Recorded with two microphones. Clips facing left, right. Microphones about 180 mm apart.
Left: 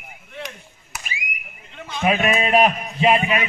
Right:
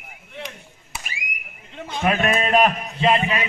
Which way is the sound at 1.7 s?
35° right (ahead or behind).